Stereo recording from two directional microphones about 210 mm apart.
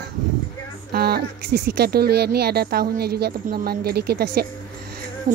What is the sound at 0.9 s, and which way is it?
Speech, 50° right (ahead or behind).